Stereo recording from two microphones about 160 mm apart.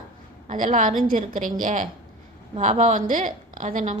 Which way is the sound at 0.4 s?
50° right (ahead or behind).